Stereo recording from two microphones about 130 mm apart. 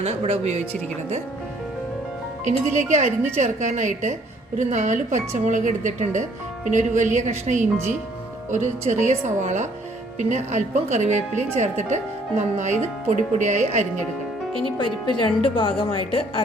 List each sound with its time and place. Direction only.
0.0 s speech: 55° right (ahead or behind)
2.4 s a woman's voice: 70° right (ahead or behind)
14.8 s a woman's voice: 40° left (ahead or behind)